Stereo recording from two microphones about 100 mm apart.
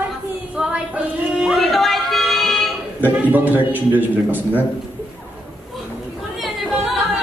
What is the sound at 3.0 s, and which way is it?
A man's voice, 15° right (ahead or behind).